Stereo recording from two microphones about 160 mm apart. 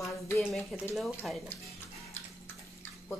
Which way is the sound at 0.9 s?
Centre (ahead or behind).